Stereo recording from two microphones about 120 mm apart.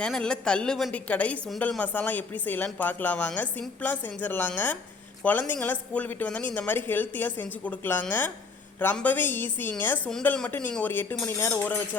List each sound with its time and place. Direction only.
0.0 s a woman's voice: 5° left (ahead or behind)